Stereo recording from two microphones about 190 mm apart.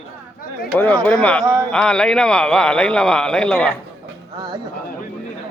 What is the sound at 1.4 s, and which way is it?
Speech, 15° right (ahead or behind).